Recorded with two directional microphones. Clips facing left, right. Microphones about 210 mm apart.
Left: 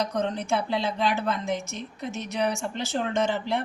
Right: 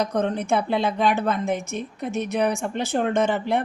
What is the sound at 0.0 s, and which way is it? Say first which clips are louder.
A woman's voice: right 4 dB; 55° right (ahead or behind).